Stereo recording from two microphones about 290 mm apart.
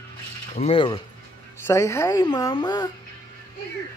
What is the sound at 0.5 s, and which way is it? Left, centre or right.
Speech, centre.